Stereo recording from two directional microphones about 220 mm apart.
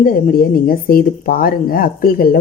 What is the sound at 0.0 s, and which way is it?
Speech, 40° left (ahead or behind).